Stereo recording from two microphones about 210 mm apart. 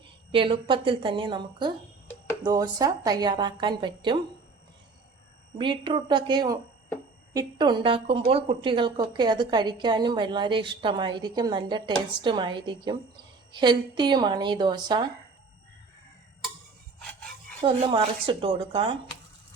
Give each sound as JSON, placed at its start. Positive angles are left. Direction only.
{"t": 0.3, "sound": "a woman's voice", "side_deg": -25}
{"t": 5.5, "sound": "a woman's voice", "side_deg": -25}
{"t": 17.6, "sound": "a woman's voice", "side_deg": -25}